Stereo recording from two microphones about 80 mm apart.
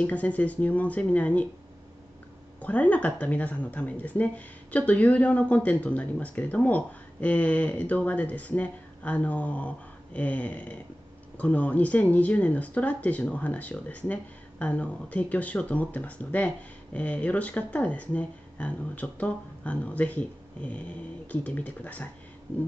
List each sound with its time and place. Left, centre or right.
0.0 s speech: centre
2.6 s speech: centre